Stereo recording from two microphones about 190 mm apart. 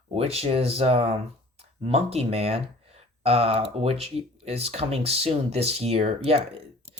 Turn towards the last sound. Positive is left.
turn(degrees=-35)  # may be behind; listen again after turning